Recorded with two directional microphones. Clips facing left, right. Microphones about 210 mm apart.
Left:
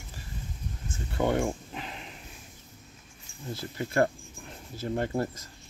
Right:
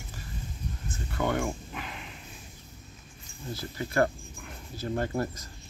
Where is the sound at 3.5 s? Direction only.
25° left (ahead or behind).